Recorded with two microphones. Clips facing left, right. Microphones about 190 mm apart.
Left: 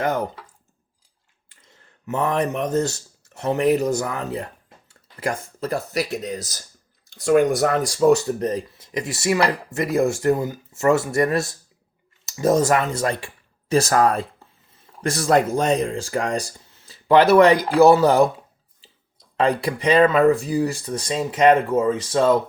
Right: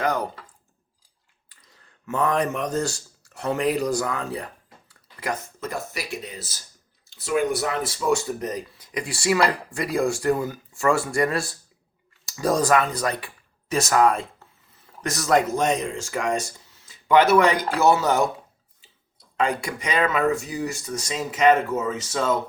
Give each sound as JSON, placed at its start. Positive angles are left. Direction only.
{"t": 0.0, "sound": "speech", "side_deg": 25}
{"t": 1.5, "sound": "speech", "side_deg": 25}
{"t": 19.4, "sound": "speech", "side_deg": 35}